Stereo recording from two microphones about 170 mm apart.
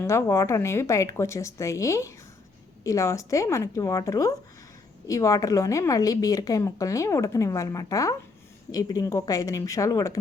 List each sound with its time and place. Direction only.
0.0 s a woman's voice: 15° left (ahead or behind)